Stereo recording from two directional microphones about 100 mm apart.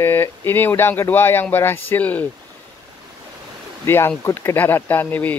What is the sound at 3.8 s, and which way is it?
Speech, 25° left (ahead or behind).